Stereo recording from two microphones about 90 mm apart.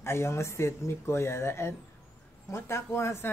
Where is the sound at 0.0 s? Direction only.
30° left (ahead or behind).